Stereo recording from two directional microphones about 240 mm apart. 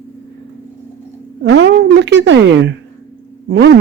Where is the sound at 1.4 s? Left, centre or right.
Right.